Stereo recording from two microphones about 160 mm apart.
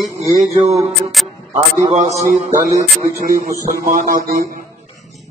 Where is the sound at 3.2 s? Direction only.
60° right (ahead or behind).